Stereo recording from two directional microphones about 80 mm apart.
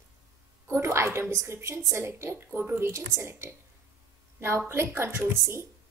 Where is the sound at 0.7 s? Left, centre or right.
Right.